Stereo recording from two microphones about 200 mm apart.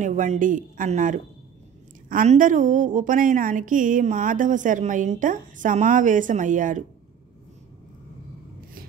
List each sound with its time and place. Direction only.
0.0 s a woman's voice: 40° right (ahead or behind)